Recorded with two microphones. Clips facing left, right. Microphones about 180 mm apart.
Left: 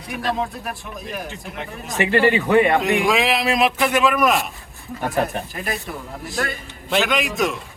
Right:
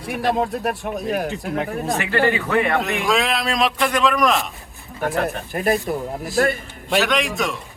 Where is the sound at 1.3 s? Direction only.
45° right (ahead or behind).